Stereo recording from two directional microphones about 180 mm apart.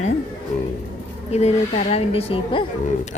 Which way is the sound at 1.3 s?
35° left (ahead or behind).